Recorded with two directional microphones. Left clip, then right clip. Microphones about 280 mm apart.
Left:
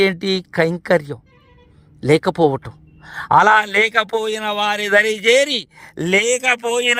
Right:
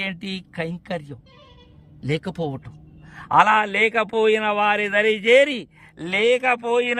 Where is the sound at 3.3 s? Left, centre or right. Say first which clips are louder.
Left 4 dB; left.